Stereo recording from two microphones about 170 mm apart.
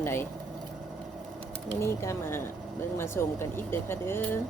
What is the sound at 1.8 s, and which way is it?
A woman's voice, 15° left (ahead or behind).